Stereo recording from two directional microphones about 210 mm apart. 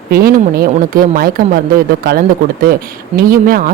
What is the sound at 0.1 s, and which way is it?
Speech, 45° right (ahead or behind).